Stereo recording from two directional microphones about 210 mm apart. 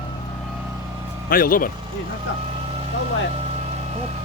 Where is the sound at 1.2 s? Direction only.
45° left (ahead or behind).